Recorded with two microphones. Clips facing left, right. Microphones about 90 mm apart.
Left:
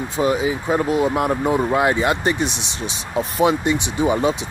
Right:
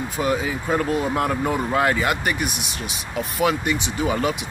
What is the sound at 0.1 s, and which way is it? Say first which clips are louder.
Speech: left 5 dB; 20° left (ahead or behind).